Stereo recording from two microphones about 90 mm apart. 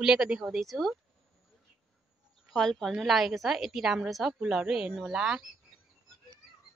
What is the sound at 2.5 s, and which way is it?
A woman's voice, 5° left (ahead or behind).